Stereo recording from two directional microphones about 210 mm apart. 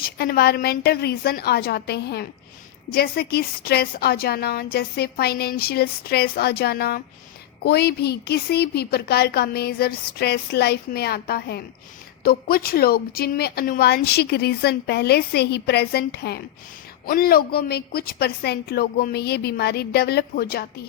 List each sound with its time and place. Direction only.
0.0 s speech: 45° left (ahead or behind)